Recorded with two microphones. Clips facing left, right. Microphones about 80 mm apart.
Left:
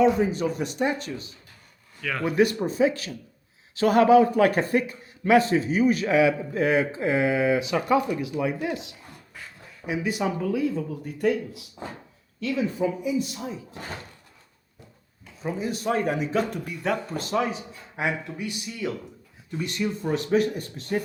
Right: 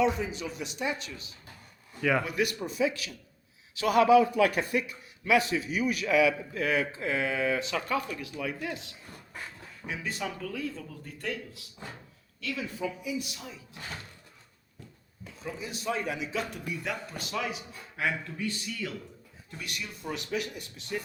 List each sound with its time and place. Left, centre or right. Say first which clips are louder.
0.2 s a man's voice: left 10 dB; left
2.0 s speech: right 4 dB; centre
2.2 s a man's voice: left 9 dB; left
12.4 s a man's voice: left 9 dB; left
15.4 s a man's voice: left 7 dB; left
17.9 s speech: left 4 dB; left
19.8 s a man's voice: left 12 dB; left